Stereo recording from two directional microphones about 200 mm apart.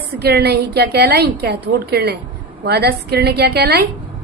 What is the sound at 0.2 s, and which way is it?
A woman's voice, 55° right (ahead or behind).